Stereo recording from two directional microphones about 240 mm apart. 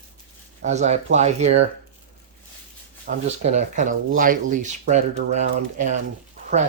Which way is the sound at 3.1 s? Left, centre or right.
Right.